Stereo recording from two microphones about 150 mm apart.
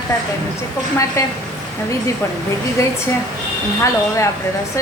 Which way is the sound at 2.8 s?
20° left (ahead or behind).